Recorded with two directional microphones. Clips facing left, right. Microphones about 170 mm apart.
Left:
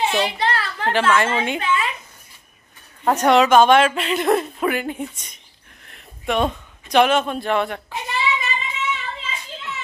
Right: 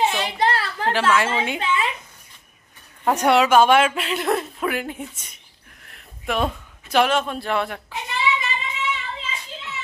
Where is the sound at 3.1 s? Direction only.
10° right (ahead or behind).